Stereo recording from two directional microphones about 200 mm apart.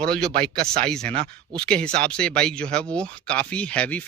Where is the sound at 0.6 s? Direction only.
50° right (ahead or behind).